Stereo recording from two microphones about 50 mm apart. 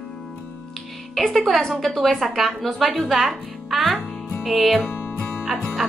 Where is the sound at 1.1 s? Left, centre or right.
Centre.